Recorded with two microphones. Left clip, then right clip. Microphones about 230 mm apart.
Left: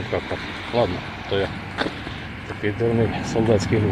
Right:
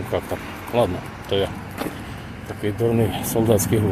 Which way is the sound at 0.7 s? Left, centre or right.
Centre.